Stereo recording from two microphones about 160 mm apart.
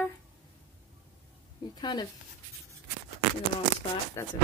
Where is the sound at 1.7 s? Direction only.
25° left (ahead or behind).